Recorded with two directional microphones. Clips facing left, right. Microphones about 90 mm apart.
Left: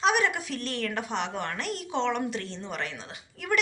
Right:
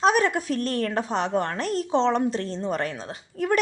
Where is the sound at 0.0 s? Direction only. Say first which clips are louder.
Right 4 dB; 40° right (ahead or behind).